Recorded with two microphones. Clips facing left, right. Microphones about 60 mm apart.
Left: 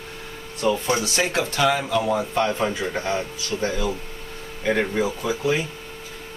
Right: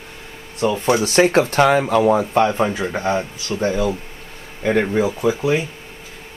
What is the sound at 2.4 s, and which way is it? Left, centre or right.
Speech, right.